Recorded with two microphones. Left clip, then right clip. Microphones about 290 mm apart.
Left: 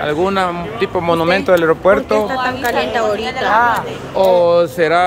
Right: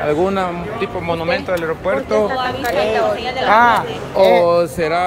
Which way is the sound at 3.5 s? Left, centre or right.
Right.